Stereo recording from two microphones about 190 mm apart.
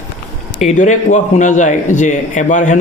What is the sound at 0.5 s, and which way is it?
Speech, 40° left (ahead or behind).